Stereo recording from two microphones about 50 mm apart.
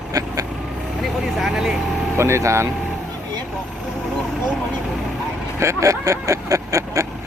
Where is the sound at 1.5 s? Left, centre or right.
Centre.